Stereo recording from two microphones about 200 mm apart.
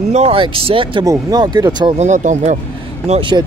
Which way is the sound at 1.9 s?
35° right (ahead or behind).